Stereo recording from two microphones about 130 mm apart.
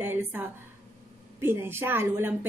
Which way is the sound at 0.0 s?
15° right (ahead or behind).